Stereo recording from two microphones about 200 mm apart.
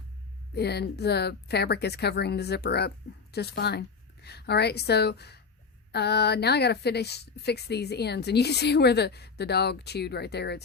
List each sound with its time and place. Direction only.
0.5 s a woman's voice: 55° left (ahead or behind)